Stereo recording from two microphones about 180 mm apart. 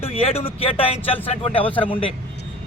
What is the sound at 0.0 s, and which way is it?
A man's voice, 35° left (ahead or behind).